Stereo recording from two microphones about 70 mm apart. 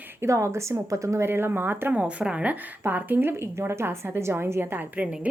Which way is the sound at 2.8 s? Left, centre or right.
Right.